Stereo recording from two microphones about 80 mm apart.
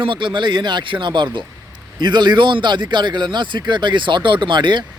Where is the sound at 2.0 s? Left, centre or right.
Right.